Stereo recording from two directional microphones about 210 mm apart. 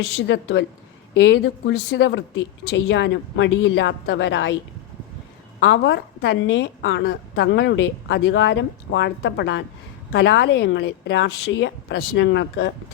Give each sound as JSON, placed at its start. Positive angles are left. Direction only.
{"t": 0.1, "sound": "a woman's voice", "side_deg": 60}
{"t": 5.5, "sound": "a woman's voice", "side_deg": 60}